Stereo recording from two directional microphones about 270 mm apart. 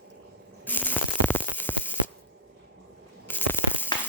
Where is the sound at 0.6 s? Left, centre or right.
Centre.